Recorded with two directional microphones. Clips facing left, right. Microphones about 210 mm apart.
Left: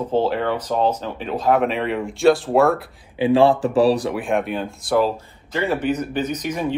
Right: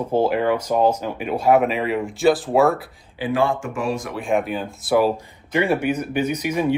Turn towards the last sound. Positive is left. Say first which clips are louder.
# right 2 dB
turn(degrees=-10)  # may be behind; listen again after turning